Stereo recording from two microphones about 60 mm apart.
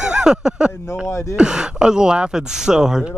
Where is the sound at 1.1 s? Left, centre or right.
Left.